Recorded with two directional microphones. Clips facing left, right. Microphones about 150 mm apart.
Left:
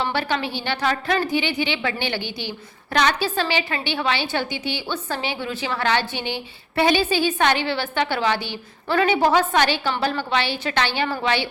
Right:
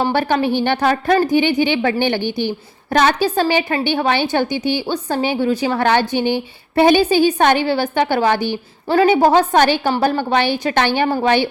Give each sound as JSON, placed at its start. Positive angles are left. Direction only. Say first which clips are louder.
{"t": 0.0, "sound": "a woman's voice", "louder": "right 7 dB", "side_deg": -45}
{"t": 8.9, "sound": "a woman's voice", "louder": "right 6 dB", "side_deg": -35}